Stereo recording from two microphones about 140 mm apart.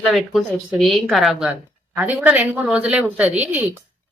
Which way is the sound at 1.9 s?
15° right (ahead or behind).